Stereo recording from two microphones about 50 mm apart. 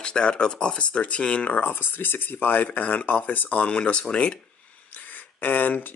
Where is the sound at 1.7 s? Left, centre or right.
Left.